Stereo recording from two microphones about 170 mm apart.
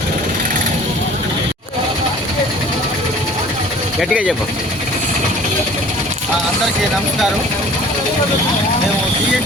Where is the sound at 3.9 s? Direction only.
5° right (ahead or behind).